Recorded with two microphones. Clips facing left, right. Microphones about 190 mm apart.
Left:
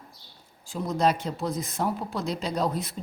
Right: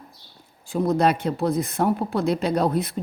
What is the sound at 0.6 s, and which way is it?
A woman's voice, 60° right (ahead or behind).